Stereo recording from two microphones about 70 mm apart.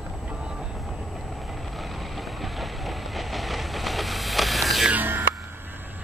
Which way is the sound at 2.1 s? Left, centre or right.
Centre.